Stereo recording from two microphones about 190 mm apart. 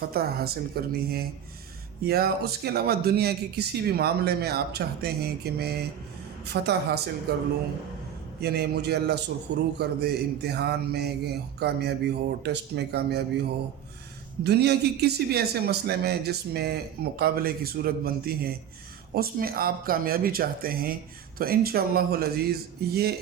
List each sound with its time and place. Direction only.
0.1 s a man's voice: 55° right (ahead or behind)
8.4 s a man's voice: 55° right (ahead or behind)
14.4 s a man's voice: 60° right (ahead or behind)